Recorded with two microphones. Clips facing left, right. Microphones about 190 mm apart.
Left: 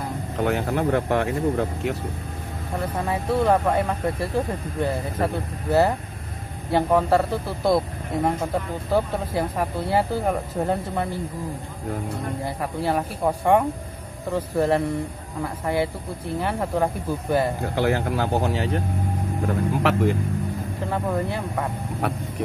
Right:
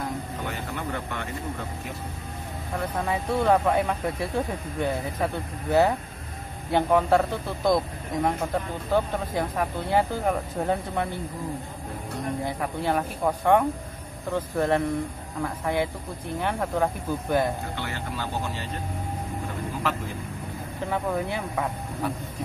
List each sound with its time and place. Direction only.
0.4 s speech: 65° left (ahead or behind)
3.1 s speech: centre (ahead or behind)
12.4 s speech: 5° left (ahead or behind)
17.7 s speech: 65° left (ahead or behind)
19.4 s vehicle: 70° left (ahead or behind)
20.9 s speech: centre (ahead or behind)
22.0 s speech: 70° left (ahead or behind)